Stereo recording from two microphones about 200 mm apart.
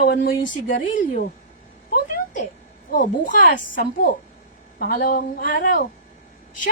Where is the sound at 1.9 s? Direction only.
45° left (ahead or behind).